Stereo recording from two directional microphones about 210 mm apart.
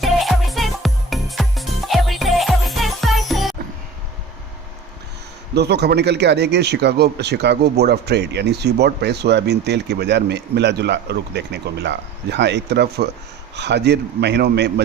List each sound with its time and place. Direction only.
0.0 s music: centre (ahead or behind)
5.5 s speech: 50° right (ahead or behind)